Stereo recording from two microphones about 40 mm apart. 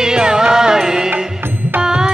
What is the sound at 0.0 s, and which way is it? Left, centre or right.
Music, centre.